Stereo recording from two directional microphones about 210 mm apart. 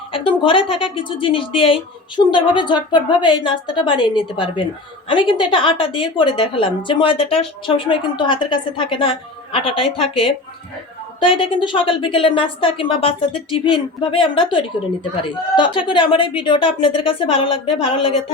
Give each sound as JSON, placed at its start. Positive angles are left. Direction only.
{"t": 0.1, "sound": "a woman's voice", "side_deg": 25}
{"t": 5.0, "sound": "a woman's voice", "side_deg": 25}
{"t": 11.2, "sound": "a woman's voice", "side_deg": 25}